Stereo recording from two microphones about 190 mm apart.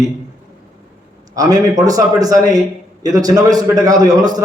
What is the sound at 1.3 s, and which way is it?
A man's voice, 20° right (ahead or behind).